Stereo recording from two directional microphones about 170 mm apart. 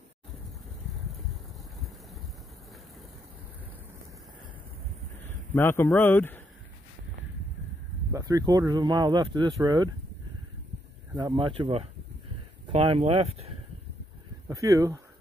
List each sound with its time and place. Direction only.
5.5 s a man's voice: 15° left (ahead or behind)
8.1 s speech: 20° right (ahead or behind)
11.1 s speech: 25° right (ahead or behind)
14.5 s speech: 20° right (ahead or behind)